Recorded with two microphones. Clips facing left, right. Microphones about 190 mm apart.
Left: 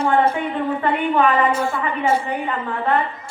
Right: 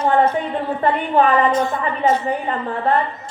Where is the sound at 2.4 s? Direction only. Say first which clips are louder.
Right 2 dB; 35° right (ahead or behind).